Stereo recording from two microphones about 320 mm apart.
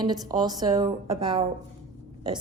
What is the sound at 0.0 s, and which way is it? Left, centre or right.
Speech, centre.